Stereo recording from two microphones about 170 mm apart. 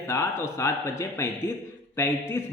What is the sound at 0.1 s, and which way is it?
Speech, 15° left (ahead or behind).